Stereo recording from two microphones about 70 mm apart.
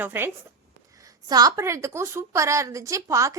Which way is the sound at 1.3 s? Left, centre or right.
Right.